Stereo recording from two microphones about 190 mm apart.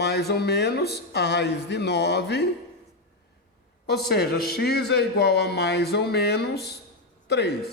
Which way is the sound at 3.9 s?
60° left (ahead or behind).